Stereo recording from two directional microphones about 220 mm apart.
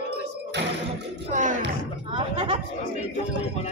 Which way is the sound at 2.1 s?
25° right (ahead or behind).